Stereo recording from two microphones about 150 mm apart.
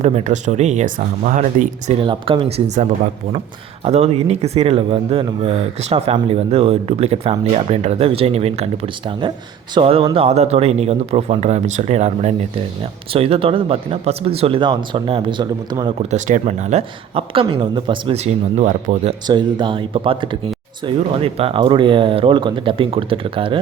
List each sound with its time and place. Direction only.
0.0 s speech: 50° right (ahead or behind); by 2.6 s 35° right (ahead or behind)
2.6 s speech: 50° right (ahead or behind); by 16.0 s 30° right (ahead or behind)
16.0 s speech: 55° right (ahead or behind)
19.3 s speech: 30° right (ahead or behind)